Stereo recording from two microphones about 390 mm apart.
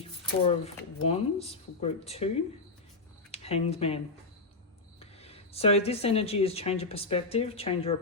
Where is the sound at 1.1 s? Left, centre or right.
Centre.